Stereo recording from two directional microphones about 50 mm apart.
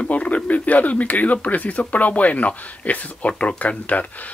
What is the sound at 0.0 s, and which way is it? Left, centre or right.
Speech, left.